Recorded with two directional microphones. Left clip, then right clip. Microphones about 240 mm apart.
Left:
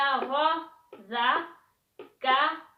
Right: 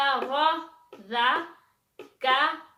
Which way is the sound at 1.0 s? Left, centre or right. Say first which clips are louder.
Right 2 dB; right.